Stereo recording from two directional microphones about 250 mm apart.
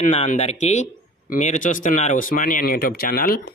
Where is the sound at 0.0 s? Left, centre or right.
Left.